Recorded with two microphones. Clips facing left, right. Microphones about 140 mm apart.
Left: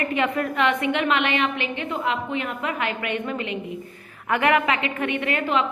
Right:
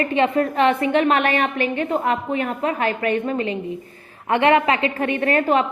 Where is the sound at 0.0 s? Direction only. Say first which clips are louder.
Right 5 dB; 30° right (ahead or behind).